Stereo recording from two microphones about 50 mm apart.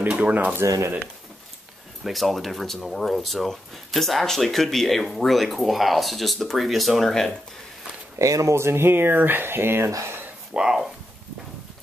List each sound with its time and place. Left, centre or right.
0.1 s speech: right
0.6 s speech: right
2.0 s speech: centre
8.2 s speech: right
9.8 s speech: right
10.5 s speech: centre